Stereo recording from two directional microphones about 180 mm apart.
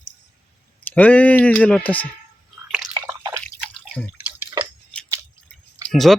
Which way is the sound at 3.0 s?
15° right (ahead or behind).